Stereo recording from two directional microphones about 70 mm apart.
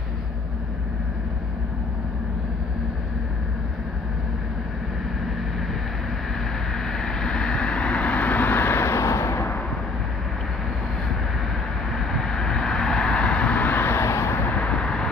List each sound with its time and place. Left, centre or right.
6.9 s vehicle: centre; by 9.5 s left
12.1 s vehicle: centre; by 14.5 s left
14.5 s vehicle: centre